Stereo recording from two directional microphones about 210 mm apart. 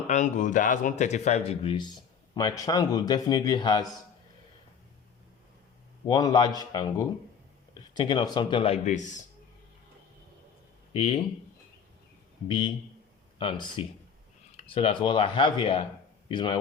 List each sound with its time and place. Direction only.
0.1 s speech: 35° left (ahead or behind)
6.1 s speech: 20° left (ahead or behind); by 9.2 s 35° left (ahead or behind)
10.9 s speech: 30° left (ahead or behind)
12.5 s speech: 25° left (ahead or behind)